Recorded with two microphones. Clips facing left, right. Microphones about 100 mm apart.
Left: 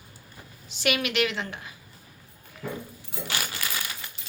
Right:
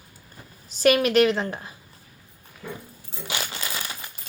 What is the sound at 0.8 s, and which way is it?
Speech, 40° right (ahead or behind).